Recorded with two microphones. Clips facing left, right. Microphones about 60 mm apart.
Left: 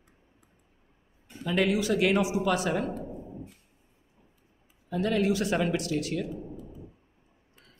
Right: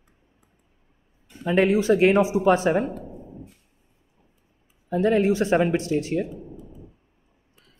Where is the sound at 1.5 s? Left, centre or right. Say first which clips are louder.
Right 7 dB; right.